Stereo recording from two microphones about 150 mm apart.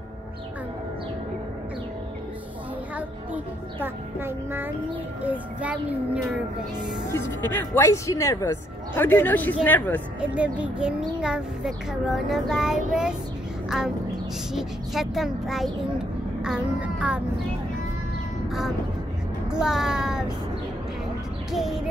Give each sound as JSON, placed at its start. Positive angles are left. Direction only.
{"t": 3.8, "sound": "a child's voice", "side_deg": -15}
{"t": 7.1, "sound": "speech", "side_deg": 15}
{"t": 10.2, "sound": "a child's voice", "side_deg": -10}
{"t": 19.5, "sound": "a child's voice", "side_deg": -5}
{"t": 21.5, "sound": "a child's voice", "side_deg": 0}